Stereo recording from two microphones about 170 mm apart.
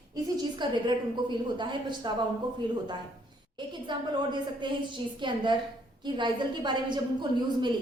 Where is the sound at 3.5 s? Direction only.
25° right (ahead or behind).